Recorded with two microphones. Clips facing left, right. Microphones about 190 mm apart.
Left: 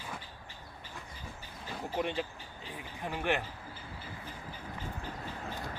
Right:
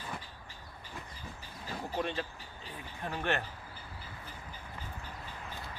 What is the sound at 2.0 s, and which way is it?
Speech, 15° left (ahead or behind).